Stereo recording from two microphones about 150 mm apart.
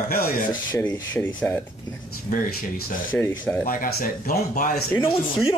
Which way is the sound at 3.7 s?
70° left (ahead or behind).